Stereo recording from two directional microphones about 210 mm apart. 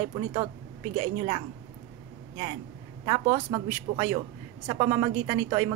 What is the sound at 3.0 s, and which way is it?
A woman's voice, 25° right (ahead or behind).